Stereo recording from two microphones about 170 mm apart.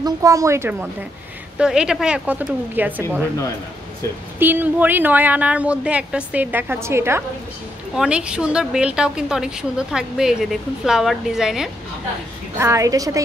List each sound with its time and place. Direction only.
0.0 s speech: 20° right (ahead or behind)
4.4 s speech: 10° right (ahead or behind)
12.5 s a woman's voice: 20° right (ahead or behind)